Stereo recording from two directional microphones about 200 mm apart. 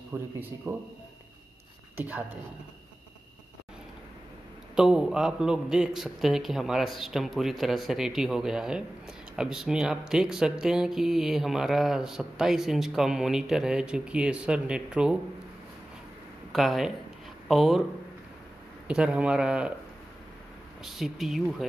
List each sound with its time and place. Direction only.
0.1 s speech: 10° right (ahead or behind)
2.0 s speech: 10° right (ahead or behind)
4.7 s a man's voice: 5° right (ahead or behind)
16.5 s a man's voice: centre (ahead or behind)
18.9 s a man's voice: 5° right (ahead or behind)
20.8 s a man's voice: centre (ahead or behind)